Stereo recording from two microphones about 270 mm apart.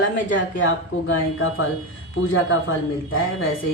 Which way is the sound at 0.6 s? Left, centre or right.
Left.